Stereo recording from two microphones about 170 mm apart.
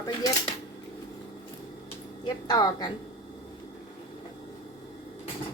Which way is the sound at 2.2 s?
25° left (ahead or behind).